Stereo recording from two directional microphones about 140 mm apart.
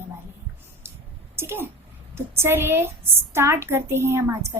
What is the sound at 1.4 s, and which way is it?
A child's voice, 15° right (ahead or behind).